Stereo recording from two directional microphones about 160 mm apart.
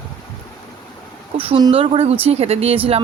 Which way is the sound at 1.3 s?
35° right (ahead or behind).